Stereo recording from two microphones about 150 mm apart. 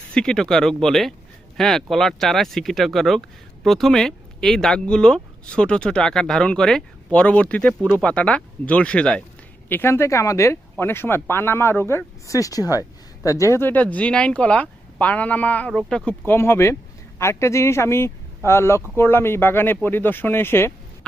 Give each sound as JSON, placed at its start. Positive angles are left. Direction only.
{"t": 0.1, "sound": "speech", "side_deg": 5}